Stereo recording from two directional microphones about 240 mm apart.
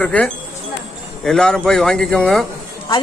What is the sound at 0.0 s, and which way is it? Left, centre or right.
Speech, centre.